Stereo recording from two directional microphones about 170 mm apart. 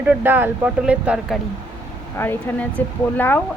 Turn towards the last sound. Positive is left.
turn(degrees=10)  # may be behind; listen again after turning